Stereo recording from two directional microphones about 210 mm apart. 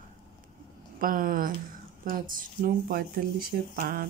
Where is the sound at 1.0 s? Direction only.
40° right (ahead or behind).